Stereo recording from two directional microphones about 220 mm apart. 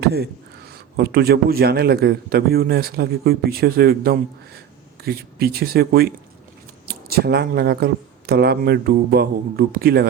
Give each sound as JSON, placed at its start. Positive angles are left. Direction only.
{"t": 0.0, "sound": "a man's voice", "side_deg": -45}